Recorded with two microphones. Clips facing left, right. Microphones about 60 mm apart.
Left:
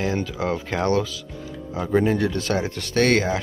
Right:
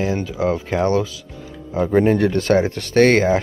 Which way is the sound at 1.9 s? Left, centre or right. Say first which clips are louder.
Right 4 dB; right.